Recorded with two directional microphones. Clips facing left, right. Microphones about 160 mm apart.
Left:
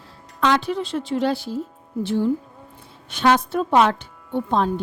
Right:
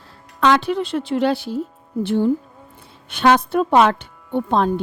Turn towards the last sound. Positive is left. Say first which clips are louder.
# right 3 dB
turn(degrees=-65)  # may be behind; listen again after turning